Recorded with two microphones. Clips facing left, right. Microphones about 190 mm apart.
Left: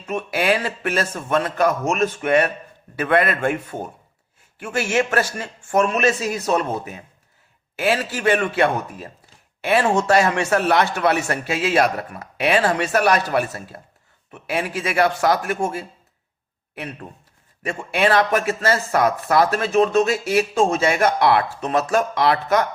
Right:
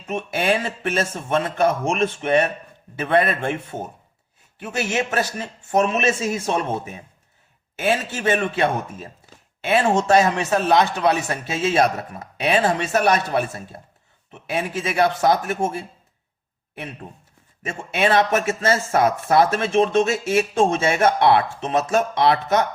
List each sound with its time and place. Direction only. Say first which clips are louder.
0.1 s speech: left 1 dB; 25° right (ahead or behind)
2.9 s speech: even; 25° right (ahead or behind)
7.8 s speech: left 1 dB; 20° right (ahead or behind)
17.7 s speech: left 1 dB; 20° right (ahead or behind)